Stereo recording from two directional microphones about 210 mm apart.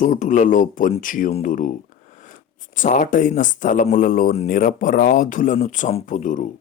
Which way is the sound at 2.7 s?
40° left (ahead or behind).